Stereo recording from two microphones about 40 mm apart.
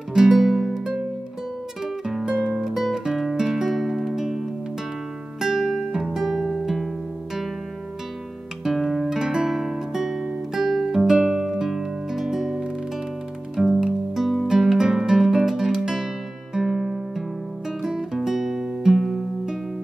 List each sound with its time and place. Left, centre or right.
0.1 s music: centre
2.2 s music: right
2.5 s music: centre
8.7 s guitar: centre
9.1 s music: centre
14.4 s guitar: centre
16.6 s music: centre